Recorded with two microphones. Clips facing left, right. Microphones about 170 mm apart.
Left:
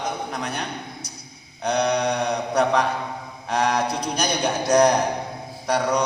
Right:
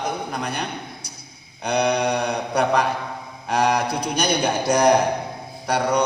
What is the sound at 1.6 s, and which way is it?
Mantra, 5° right (ahead or behind).